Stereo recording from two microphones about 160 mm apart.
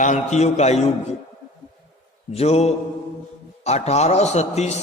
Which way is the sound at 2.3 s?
40° left (ahead or behind).